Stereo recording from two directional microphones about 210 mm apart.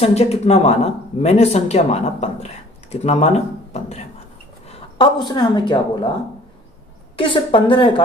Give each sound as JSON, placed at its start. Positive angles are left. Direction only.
{"t": 0.0, "sound": "a woman's voice", "side_deg": 30}
{"t": 7.2, "sound": "speech", "side_deg": 25}